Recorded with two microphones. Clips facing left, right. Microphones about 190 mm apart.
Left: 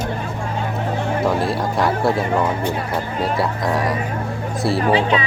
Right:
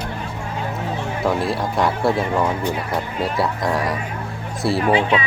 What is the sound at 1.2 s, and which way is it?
Speech, centre (ahead or behind).